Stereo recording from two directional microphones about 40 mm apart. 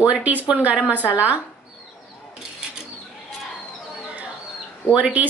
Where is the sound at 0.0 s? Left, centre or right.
Right.